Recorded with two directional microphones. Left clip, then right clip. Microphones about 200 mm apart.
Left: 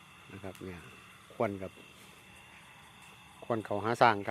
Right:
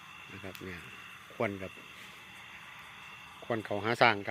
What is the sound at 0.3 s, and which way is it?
Speech, 5° left (ahead or behind).